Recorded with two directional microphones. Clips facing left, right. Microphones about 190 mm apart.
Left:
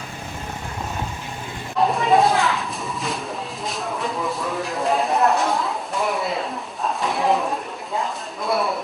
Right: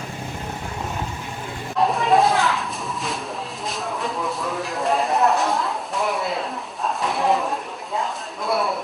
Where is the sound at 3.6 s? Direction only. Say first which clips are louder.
Left 1 dB; centre (ahead or behind).